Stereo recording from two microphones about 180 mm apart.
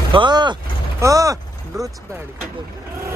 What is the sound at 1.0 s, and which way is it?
Speech, 20° right (ahead or behind).